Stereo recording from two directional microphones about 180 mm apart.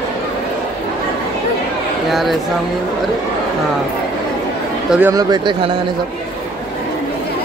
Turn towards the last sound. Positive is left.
turn(degrees=-25)  # may be behind; listen again after turning